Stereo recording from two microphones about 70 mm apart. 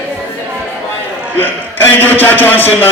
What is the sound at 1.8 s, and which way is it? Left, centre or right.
Speech, left.